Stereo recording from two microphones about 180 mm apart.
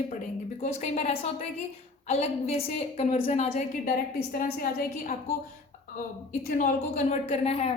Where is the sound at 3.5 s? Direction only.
50° left (ahead or behind).